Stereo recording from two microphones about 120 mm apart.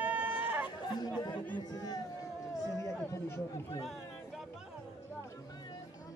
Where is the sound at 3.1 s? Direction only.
25° left (ahead or behind).